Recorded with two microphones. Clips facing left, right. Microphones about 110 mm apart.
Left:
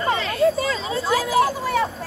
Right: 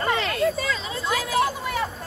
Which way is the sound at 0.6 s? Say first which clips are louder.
Left 4 dB; 30° left (ahead or behind).